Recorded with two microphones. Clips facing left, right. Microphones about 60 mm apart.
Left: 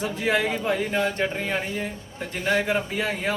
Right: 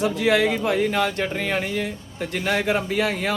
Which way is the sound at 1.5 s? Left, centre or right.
Left.